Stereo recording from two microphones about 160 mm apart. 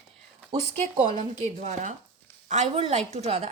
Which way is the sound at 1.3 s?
45° right (ahead or behind).